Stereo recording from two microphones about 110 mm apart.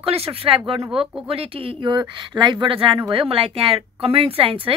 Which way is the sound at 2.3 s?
45° right (ahead or behind).